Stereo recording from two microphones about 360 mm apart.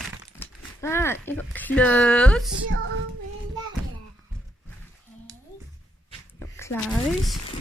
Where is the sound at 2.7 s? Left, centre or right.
Right.